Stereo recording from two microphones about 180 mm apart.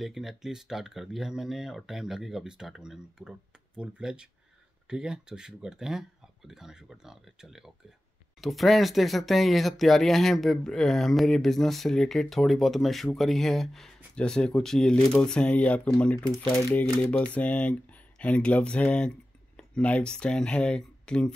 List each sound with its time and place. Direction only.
0.0 s speech: centre (ahead or behind)
17.0 s a sound: 5° left (ahead or behind)
18.2 s speech: 5° left (ahead or behind)